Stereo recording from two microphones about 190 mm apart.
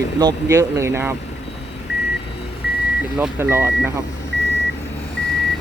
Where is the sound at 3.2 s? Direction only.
10° right (ahead or behind).